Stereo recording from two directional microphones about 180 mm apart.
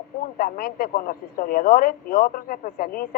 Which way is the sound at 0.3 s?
50° left (ahead or behind).